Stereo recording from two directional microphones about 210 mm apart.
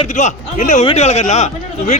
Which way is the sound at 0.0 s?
35° left (ahead or behind).